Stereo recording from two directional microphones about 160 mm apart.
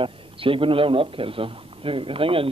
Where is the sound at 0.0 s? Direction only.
35° right (ahead or behind).